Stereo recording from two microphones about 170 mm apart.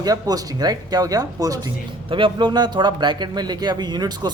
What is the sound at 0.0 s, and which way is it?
Speech, 20° right (ahead or behind).